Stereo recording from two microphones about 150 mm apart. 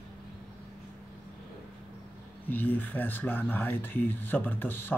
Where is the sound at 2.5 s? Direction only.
10° left (ahead or behind).